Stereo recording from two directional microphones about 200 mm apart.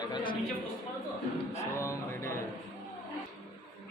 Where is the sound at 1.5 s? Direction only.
15° left (ahead or behind).